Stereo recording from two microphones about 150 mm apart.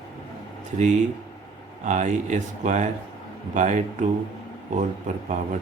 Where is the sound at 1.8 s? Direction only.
55° right (ahead or behind).